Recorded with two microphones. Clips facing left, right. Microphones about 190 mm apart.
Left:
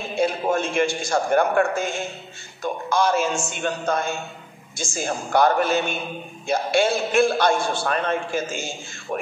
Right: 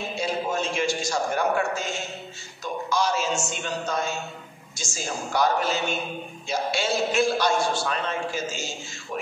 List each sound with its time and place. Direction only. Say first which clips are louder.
0.1 s a man's voice: left 7 dB; 55° left (ahead or behind)